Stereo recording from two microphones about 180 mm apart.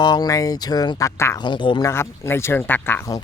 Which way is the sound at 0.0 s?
20° left (ahead or behind).